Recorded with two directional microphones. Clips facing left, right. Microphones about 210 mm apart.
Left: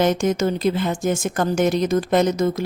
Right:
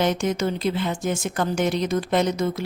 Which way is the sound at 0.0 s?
45° left (ahead or behind).